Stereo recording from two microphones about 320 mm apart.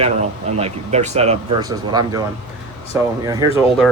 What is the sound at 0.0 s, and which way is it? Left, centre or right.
Speech, centre.